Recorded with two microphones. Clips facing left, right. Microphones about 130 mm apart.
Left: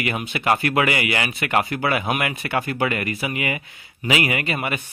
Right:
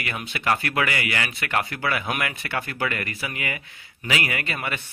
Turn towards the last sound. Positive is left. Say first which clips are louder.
# left 5 dB
turn(degrees=20)  # may be behind; listen again after turning